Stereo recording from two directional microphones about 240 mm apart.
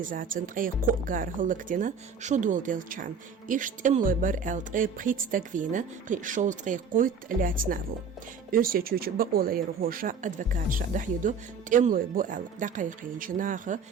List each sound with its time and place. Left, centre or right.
0.0 s speech: right